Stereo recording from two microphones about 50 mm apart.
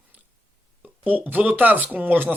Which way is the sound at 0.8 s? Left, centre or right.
Right.